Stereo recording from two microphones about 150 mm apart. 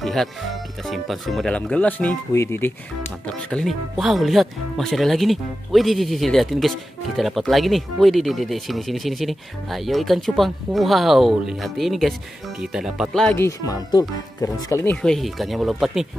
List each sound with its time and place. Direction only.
0.0 s speech: centre (ahead or behind); by 2.7 s 15° left (ahead or behind)
3.3 s speech: 5° left (ahead or behind)
13.4 s speech: 20° left (ahead or behind)
15.0 s speech: 5° left (ahead or behind)